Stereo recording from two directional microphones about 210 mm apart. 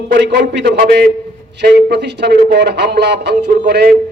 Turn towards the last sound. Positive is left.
turn(degrees=-50)  # may be behind; listen again after turning